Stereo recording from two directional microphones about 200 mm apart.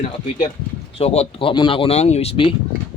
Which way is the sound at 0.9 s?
30° left (ahead or behind).